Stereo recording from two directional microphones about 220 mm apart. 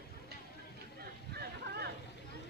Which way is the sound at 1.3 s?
45° right (ahead or behind).